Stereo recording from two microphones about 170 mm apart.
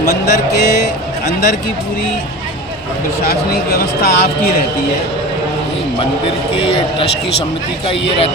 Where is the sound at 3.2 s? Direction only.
65° left (ahead or behind).